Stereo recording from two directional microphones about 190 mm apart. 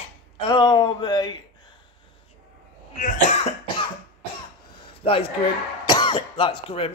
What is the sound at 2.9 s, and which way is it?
Cough, 40° left (ahead or behind).